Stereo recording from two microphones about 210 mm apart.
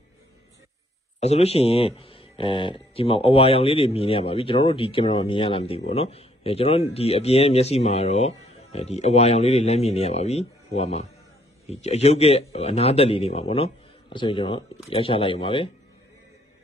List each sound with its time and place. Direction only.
1.2 s speech: 30° left (ahead or behind)